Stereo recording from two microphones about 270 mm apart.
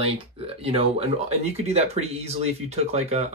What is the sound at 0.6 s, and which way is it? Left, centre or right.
Speech, right.